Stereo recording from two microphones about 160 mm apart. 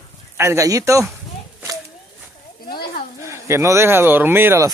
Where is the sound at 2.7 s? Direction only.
70° left (ahead or behind).